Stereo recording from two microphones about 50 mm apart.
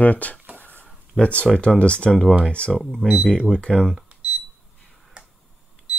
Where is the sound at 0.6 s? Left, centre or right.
Left.